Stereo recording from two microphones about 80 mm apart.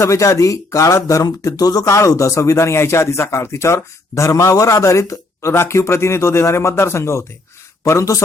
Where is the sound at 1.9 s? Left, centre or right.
Left.